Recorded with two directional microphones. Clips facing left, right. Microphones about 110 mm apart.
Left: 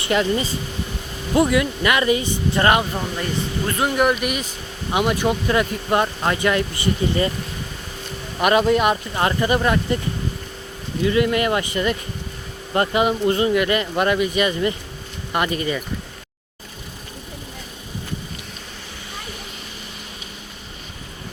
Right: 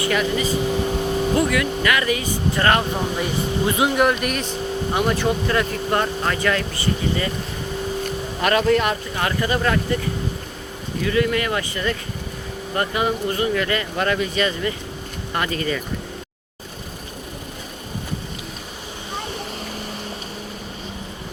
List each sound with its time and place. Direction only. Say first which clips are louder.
0.0 s speech: left 1 dB; 25° left (ahead or behind)
2.9 s speech: right 2 dB; 10° right (ahead or behind)
4.0 s speech: even; 5° left (ahead or behind)
4.9 s speech: left 2 dB; 15° left (ahead or behind)
8.4 s speech: left 2 dB; 15° left (ahead or behind)
11.0 s speech: left 2 dB; 20° left (ahead or behind)